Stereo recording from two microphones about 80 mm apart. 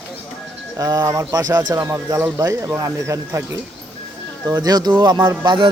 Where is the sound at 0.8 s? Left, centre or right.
Right.